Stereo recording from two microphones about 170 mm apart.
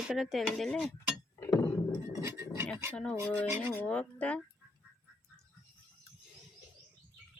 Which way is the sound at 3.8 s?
5° left (ahead or behind).